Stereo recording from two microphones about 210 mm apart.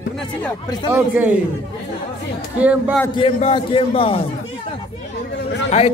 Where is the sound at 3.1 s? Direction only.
25° left (ahead or behind).